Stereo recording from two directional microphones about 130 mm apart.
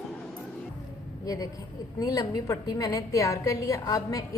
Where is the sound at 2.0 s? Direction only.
30° left (ahead or behind).